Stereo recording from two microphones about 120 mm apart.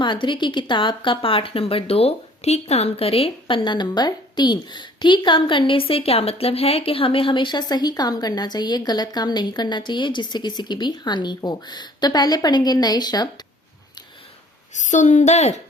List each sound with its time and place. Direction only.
0.0 s speech: 40° left (ahead or behind)
14.7 s a woman's voice: 90° left; by 15.6 s 70° left (ahead or behind)